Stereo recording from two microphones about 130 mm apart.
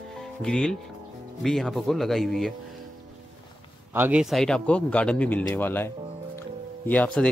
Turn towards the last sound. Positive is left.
turn(degrees=10)  # may be behind; listen again after turning